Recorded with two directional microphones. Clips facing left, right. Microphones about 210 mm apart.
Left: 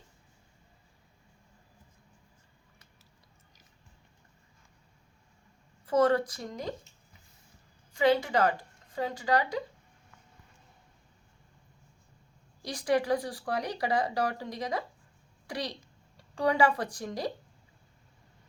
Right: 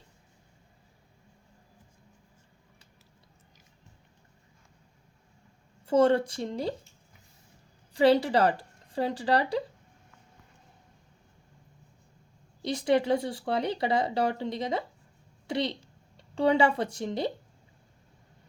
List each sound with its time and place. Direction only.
5.8 s speech: 25° right (ahead or behind)
7.9 s speech: 35° right (ahead or behind)
12.6 s speech: 25° right (ahead or behind)